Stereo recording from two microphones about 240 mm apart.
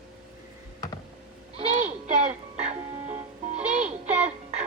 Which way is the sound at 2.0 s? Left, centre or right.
Right.